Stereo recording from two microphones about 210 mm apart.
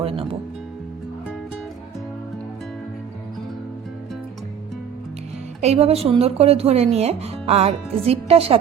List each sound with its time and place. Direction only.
5.5 s speech: 30° right (ahead or behind)